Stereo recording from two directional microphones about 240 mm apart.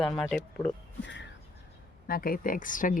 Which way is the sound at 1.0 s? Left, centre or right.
Left.